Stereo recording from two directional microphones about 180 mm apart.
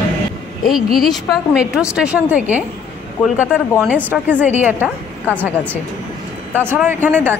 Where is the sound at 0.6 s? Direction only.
Centre (ahead or behind).